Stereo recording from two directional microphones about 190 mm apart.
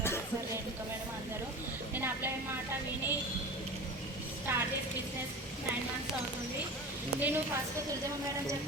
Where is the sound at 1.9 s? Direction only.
10° right (ahead or behind).